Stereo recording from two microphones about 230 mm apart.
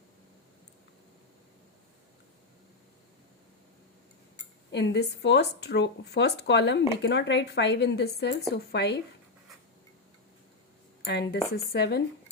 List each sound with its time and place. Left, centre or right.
4.7 s speech: left
11.0 s speech: left